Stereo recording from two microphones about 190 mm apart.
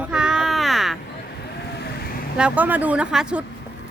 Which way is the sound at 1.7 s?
55° left (ahead or behind).